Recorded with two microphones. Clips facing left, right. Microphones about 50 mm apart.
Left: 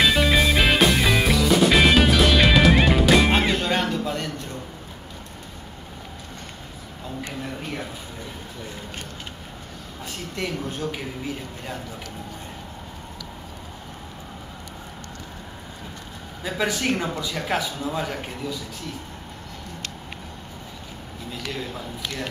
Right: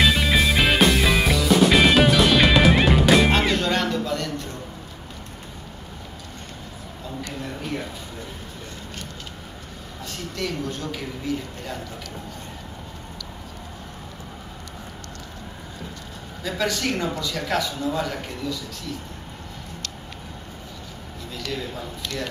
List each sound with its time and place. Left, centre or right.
0.0 s music: centre
3.3 s music: centre
10.3 s speech: left
16.4 s a man's voice: centre
21.4 s speech: centre